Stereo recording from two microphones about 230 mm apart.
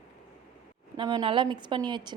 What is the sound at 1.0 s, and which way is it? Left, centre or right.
A woman's voice, centre.